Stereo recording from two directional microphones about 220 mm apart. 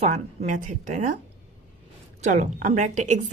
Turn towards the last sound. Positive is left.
turn(degrees=-30)  # may be behind; listen again after turning